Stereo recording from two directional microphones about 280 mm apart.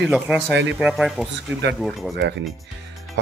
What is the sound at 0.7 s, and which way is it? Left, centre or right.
Speech, centre.